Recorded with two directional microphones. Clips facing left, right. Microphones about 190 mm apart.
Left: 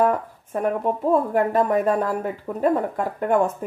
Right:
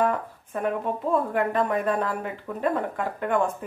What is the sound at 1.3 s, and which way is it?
Speech, 40° left (ahead or behind).